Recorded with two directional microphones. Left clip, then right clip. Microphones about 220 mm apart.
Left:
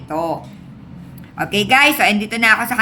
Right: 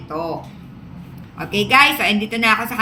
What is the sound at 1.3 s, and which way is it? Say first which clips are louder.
A woman's voice: even; 45° left (ahead or behind).